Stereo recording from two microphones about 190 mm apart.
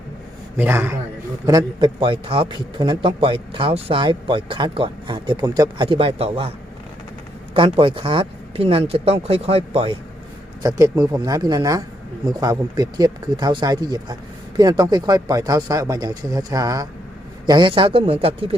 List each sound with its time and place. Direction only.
0.5 s a man's voice: 10° right (ahead or behind); by 6.5 s 30° right (ahead or behind)
7.5 s a man's voice: 30° right (ahead or behind)
10.6 s a man's voice: 20° right (ahead or behind)